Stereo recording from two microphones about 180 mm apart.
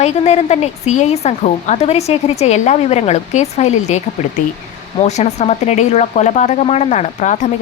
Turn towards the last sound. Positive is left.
turn(degrees=40)  # may be behind; listen again after turning